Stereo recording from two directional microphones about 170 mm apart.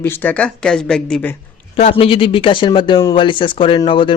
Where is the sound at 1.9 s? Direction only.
30° left (ahead or behind).